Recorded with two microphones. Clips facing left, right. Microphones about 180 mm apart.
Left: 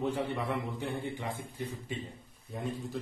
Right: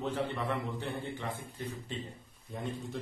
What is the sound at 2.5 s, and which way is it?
Speech, centre (ahead or behind).